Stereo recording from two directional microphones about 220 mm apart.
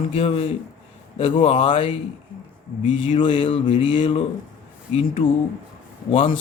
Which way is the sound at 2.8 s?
60° left (ahead or behind).